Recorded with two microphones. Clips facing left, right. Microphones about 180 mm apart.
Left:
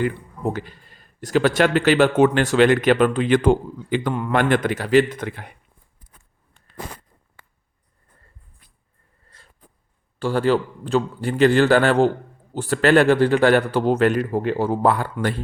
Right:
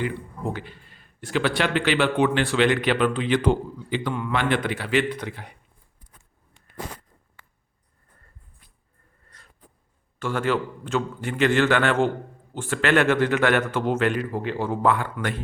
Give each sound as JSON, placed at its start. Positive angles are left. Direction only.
{"t": 0.0, "sound": "speech", "side_deg": 45}
{"t": 9.3, "sound": "a sound", "side_deg": 25}
{"t": 10.2, "sound": "a man's voice", "side_deg": 35}